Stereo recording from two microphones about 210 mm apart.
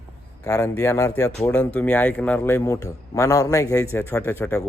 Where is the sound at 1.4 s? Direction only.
5° left (ahead or behind).